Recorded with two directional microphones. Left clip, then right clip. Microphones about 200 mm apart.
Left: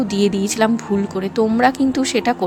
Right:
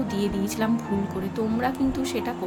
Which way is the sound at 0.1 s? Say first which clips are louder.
Left 9 dB; 45° left (ahead or behind).